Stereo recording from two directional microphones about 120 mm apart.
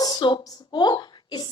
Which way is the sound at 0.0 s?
35° left (ahead or behind).